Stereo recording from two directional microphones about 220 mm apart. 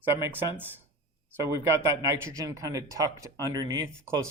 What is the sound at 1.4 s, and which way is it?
Speech, 10° right (ahead or behind).